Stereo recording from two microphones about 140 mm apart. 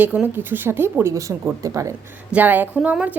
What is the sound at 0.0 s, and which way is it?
A woman's voice, 10° right (ahead or behind).